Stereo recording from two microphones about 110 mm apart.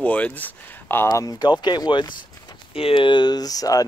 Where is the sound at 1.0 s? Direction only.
35° left (ahead or behind).